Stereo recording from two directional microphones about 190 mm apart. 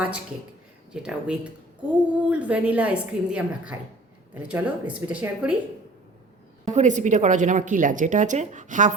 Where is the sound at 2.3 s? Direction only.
5° right (ahead or behind).